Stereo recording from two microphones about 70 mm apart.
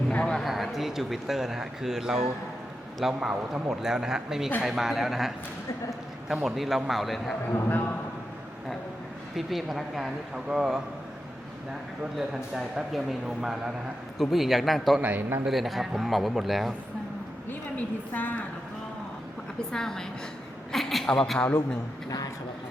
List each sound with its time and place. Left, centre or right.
0.1 s a man's voice: centre
0.3 s a man's voice: centre
9.3 s speech: centre
12.1 s speech: centre
15.0 s a man's voice: right
15.4 s speech: centre
17.5 s a woman's voice: left
19.7 s a woman's voice: centre